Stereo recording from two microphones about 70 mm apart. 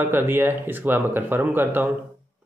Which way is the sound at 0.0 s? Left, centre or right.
Right.